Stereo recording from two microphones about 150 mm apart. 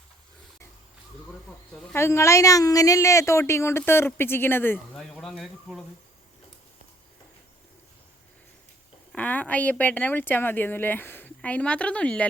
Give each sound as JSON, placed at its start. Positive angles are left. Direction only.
{"t": 1.7, "sound": "speech", "side_deg": 15}
{"t": 9.1, "sound": "speech", "side_deg": 10}